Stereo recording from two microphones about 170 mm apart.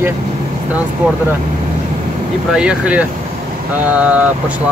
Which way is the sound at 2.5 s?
5° right (ahead or behind).